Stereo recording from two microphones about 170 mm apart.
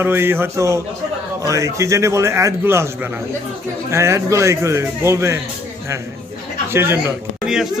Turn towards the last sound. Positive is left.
turn(degrees=-5)  # may be behind; listen again after turning